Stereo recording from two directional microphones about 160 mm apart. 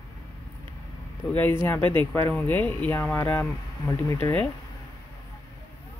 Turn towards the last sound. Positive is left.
turn(degrees=15)  # may be behind; listen again after turning